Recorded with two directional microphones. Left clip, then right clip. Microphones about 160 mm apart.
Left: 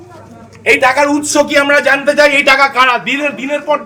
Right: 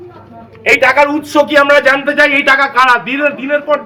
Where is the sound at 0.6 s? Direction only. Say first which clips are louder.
Right 1 dB; 15° right (ahead or behind).